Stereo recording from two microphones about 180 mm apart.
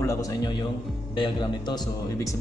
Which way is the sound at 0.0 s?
15° left (ahead or behind).